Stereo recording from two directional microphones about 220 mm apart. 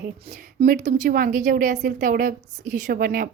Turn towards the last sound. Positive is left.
turn(degrees=-40)  # may be behind; listen again after turning